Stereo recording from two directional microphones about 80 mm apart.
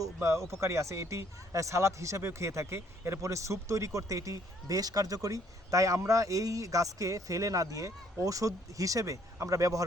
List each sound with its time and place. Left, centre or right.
0.0 s a man's voice: right